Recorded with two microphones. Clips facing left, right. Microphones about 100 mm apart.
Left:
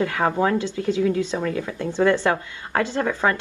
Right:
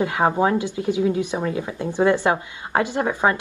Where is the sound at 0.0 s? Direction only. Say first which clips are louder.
Right 2 dB; 25° right (ahead or behind).